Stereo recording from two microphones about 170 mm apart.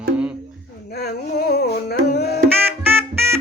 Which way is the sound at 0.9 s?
65° left (ahead or behind).